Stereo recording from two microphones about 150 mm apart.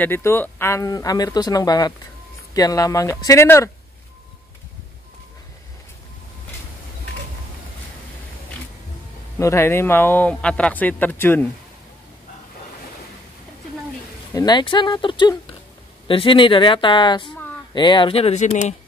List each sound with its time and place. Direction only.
0.0 s speech: 15° left (ahead or behind)
9.4 s speech: 20° left (ahead or behind)
14.3 s speech: 25° left (ahead or behind); by 18.8 s 50° left (ahead or behind)